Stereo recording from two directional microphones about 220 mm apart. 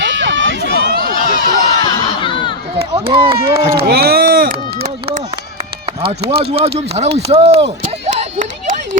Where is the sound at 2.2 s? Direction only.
20° left (ahead or behind).